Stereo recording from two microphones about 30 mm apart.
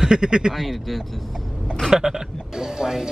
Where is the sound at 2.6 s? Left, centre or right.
Centre.